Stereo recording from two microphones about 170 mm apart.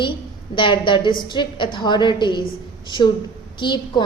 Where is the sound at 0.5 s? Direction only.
30° left (ahead or behind).